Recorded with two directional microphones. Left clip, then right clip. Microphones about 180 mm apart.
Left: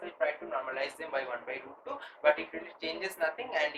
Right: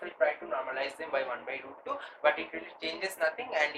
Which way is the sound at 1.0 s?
15° right (ahead or behind).